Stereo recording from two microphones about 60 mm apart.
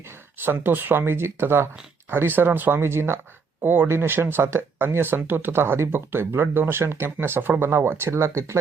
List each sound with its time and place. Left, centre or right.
0.4 s speech: right